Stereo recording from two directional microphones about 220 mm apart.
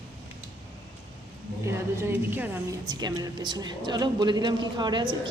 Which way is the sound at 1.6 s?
10° right (ahead or behind).